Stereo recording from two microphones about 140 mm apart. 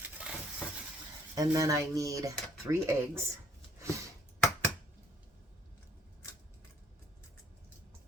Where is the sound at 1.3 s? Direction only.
25° right (ahead or behind).